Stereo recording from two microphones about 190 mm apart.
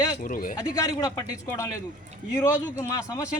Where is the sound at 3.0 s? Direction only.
20° left (ahead or behind).